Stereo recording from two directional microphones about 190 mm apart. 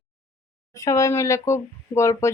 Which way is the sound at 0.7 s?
15° left (ahead or behind).